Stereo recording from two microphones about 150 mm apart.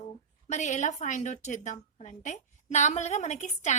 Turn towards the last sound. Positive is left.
turn(degrees=50)  # may be behind; listen again after turning